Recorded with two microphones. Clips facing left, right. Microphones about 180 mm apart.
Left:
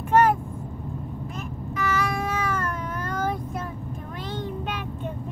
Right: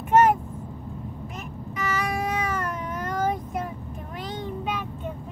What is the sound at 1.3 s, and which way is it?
Baby cry, 15° right (ahead or behind).